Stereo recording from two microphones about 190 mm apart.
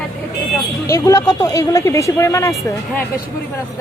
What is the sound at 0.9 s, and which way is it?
A woman's voice, 15° left (ahead or behind).